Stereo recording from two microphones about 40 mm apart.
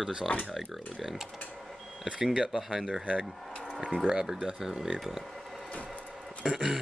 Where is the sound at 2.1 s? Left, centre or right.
Centre.